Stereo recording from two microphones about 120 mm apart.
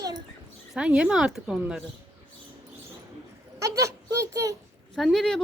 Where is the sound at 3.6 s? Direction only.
25° right (ahead or behind).